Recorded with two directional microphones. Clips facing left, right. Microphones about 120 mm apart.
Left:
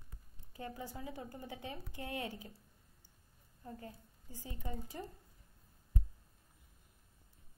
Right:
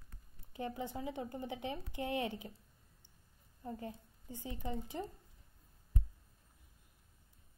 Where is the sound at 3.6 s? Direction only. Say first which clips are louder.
Right 5 dB; 25° right (ahead or behind).